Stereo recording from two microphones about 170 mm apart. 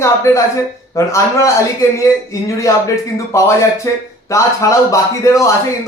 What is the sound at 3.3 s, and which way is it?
Speech, 15° left (ahead or behind).